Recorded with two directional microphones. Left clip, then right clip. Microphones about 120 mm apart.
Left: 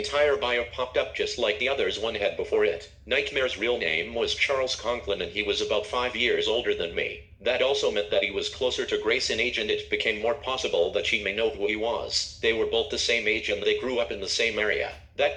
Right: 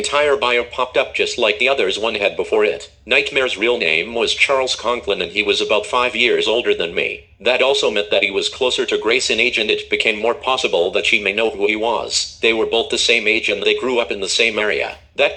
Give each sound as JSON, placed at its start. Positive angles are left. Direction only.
{"t": 0.1, "sound": "speech", "side_deg": -45}